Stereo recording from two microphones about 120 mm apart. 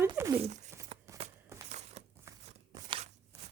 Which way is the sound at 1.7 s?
70° right (ahead or behind).